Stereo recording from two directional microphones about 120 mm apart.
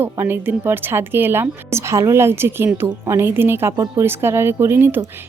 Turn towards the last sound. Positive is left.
turn(degrees=-20)  # may be behind; listen again after turning